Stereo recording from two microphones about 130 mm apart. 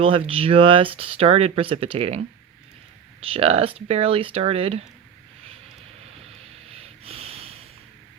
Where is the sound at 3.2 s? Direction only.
50° right (ahead or behind).